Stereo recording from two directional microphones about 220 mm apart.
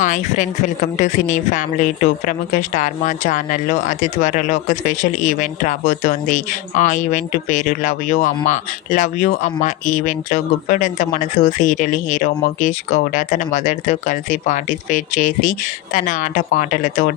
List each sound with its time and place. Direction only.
0.0 s speech: 35° left (ahead or behind)